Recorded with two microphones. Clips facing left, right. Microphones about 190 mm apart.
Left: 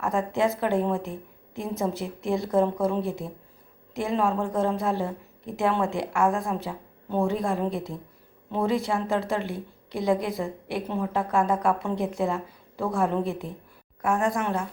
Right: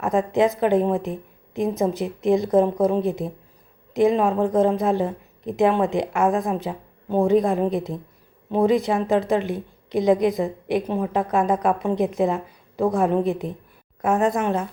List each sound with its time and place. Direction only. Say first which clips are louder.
0.0 s a woman's voice: right 5 dB; 20° right (ahead or behind)